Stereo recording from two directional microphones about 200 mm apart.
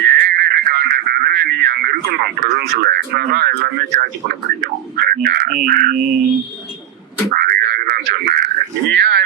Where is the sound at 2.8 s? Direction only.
55° right (ahead or behind).